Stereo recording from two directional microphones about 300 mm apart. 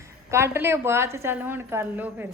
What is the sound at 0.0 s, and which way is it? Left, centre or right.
A woman's voice, centre.